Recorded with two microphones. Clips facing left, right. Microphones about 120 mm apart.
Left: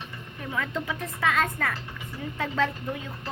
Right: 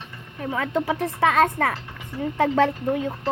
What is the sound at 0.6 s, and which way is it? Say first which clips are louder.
Speech: right 6 dB; 60° right (ahead or behind).